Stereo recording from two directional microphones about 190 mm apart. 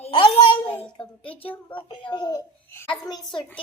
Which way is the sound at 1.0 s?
5° left (ahead or behind).